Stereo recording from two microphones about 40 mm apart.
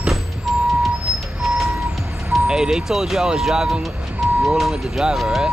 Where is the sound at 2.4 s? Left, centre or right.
Centre.